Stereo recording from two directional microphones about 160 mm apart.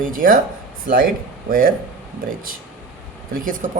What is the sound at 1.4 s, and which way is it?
Speech, 60° right (ahead or behind).